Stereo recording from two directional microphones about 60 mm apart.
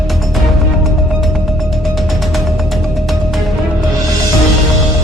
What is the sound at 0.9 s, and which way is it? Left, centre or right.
Music, centre.